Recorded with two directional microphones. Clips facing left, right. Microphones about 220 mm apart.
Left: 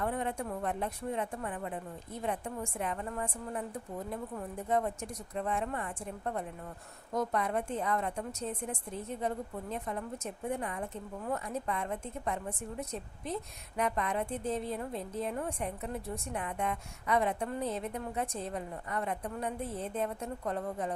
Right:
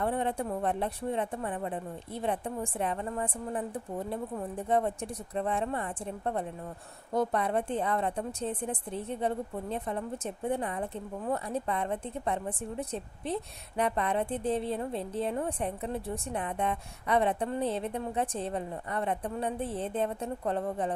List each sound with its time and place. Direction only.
0.0 s a woman's voice: 30° right (ahead or behind)